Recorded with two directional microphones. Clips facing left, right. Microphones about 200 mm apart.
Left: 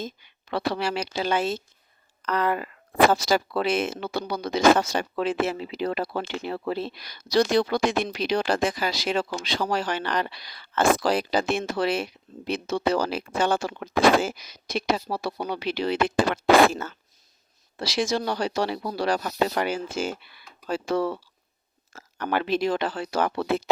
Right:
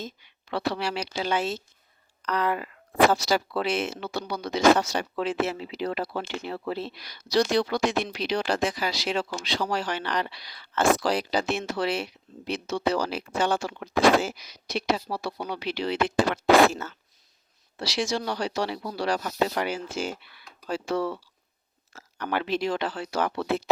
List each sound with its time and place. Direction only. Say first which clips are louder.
0.0 s speech: left 3 dB; 50° left (ahead or behind)
17.7 s speech: left 3 dB; 50° left (ahead or behind)